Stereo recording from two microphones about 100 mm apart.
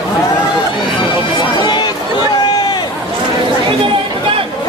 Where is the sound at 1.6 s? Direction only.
50° left (ahead or behind).